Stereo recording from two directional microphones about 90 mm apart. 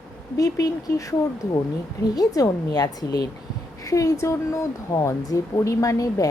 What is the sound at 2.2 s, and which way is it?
Speech, 40° left (ahead or behind).